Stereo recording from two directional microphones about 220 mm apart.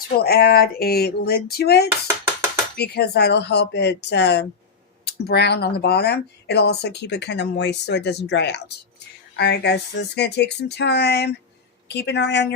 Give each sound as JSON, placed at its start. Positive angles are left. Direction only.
{"t": 0.2, "sound": "speech", "side_deg": 45}